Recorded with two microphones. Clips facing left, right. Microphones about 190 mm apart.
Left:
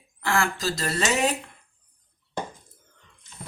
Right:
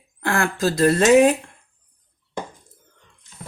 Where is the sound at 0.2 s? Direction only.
55° right (ahead or behind).